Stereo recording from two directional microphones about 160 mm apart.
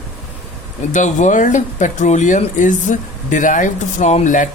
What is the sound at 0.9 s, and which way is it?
Speech, 50° left (ahead or behind).